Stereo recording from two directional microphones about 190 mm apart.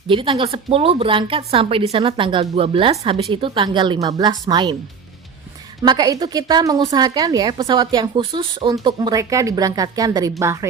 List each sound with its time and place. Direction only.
0.1 s a woman's voice: 25° right (ahead or behind)
5.8 s a woman's voice: 20° right (ahead or behind)